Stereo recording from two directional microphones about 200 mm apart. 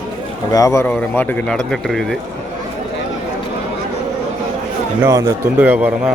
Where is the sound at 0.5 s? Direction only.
15° left (ahead or behind).